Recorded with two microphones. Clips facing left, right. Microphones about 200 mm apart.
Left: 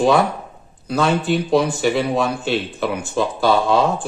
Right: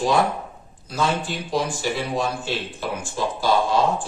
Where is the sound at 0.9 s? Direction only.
65° left (ahead or behind).